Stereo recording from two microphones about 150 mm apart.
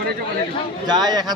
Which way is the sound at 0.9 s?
25° right (ahead or behind).